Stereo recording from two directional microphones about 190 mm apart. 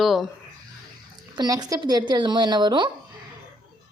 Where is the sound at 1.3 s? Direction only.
20° right (ahead or behind).